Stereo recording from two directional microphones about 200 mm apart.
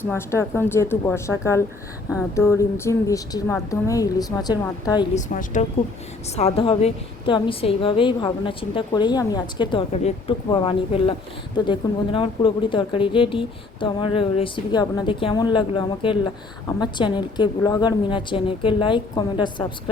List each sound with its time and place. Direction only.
0.0 s speech: 10° left (ahead or behind)
5.1 s speech: 40° left (ahead or behind); by 9.8 s 20° left (ahead or behind)
9.9 s speech: 30° left (ahead or behind)